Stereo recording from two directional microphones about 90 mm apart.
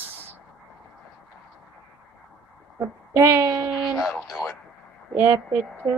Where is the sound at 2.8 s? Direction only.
25° right (ahead or behind).